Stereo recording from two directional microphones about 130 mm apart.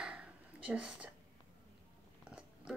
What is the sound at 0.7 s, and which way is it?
Speech, 10° right (ahead or behind).